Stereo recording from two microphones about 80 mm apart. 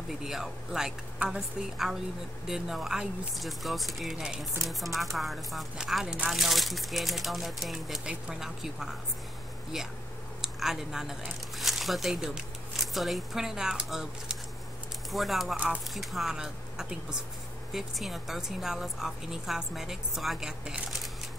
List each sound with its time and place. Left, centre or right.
0.2 s speech: centre
1.2 s speech: centre
2.4 s speech: centre
10.4 s speech: centre
15.5 s speech: centre
15.9 s speech: centre